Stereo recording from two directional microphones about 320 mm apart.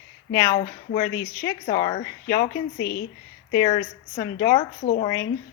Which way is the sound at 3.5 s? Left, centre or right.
Centre.